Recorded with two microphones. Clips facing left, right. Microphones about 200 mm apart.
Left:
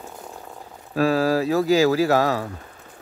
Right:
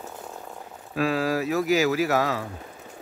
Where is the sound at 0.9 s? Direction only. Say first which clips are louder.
Left 5 dB; 35° left (ahead or behind).